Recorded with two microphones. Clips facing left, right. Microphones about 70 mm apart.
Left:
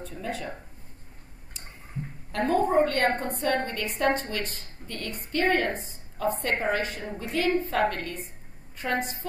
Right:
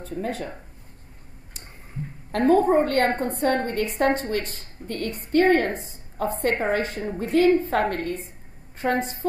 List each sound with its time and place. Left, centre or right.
0.0 s a woman's voice: right
2.3 s a woman's voice: right